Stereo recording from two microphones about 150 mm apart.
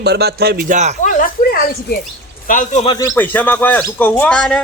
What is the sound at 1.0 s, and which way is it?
Speech, 65° left (ahead or behind).